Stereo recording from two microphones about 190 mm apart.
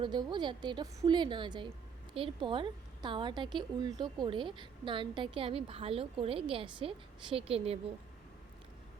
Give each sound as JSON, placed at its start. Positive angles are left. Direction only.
{"t": 0.0, "sound": "a woman's voice", "side_deg": -25}